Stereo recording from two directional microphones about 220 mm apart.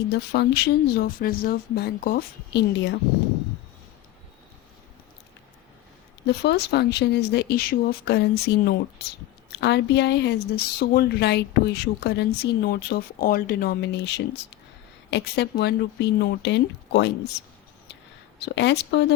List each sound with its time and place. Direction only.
0.1 s speech: 50° left (ahead or behind)
6.2 s speech: 50° left (ahead or behind)
15.1 s speech: 50° left (ahead or behind)
18.3 s speech: 50° left (ahead or behind)